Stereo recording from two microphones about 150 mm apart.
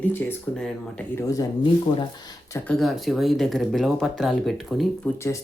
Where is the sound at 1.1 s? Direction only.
20° left (ahead or behind).